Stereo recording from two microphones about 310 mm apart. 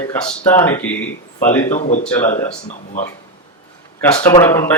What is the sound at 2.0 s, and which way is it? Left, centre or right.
Speech, centre.